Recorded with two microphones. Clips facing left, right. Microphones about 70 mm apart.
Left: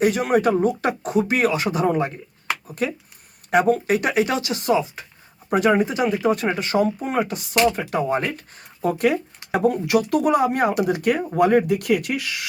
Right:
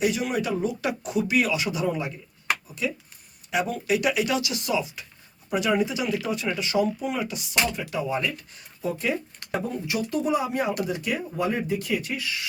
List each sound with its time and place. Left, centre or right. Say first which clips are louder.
0.0 s speech: left 7 dB; left
9.5 s speech: left 10 dB; left